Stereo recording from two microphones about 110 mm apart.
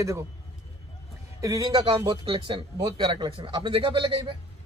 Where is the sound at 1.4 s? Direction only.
30° right (ahead or behind).